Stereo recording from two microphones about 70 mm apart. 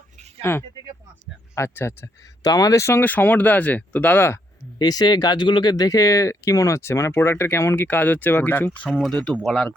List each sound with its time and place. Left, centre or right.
0.4 s speech: left
2.4 s speech: left
3.0 s speech: left
4.8 s speech: left
9.0 s speech: centre